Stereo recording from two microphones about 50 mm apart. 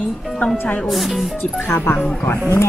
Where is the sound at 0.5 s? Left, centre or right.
Left.